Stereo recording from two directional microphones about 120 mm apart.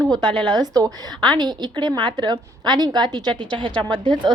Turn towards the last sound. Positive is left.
turn(degrees=-40)  # may be behind; listen again after turning